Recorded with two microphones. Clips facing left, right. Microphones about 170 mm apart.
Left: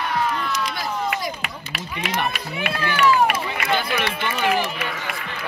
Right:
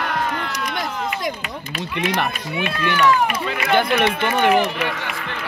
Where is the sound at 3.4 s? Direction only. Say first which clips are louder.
Right 5 dB; 60° right (ahead or behind).